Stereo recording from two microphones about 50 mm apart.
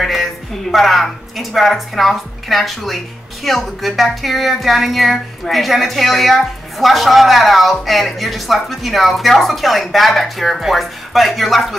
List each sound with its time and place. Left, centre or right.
0.0 s a woman's voice: centre